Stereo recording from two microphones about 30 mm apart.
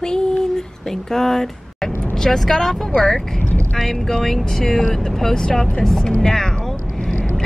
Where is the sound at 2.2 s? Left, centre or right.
Centre.